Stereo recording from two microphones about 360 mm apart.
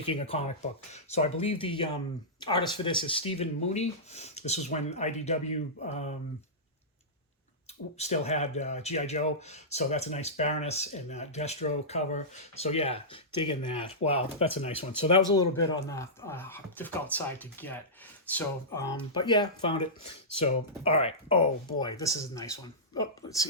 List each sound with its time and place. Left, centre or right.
0.0 s speech: centre
7.9 s speech: centre